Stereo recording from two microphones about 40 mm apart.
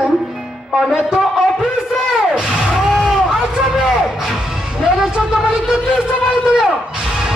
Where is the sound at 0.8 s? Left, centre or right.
Centre.